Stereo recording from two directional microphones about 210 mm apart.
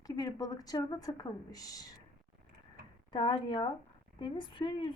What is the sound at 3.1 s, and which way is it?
A woman's voice, 20° left (ahead or behind).